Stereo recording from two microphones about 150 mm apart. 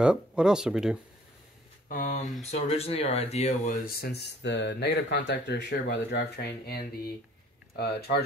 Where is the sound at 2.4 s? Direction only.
45° left (ahead or behind); by 4.2 s 90° left.